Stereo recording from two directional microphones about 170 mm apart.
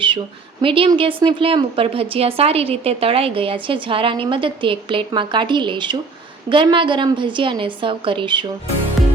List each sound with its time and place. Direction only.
0.6 s a woman's voice: 30° right (ahead or behind)
9.0 s music: centre (ahead or behind)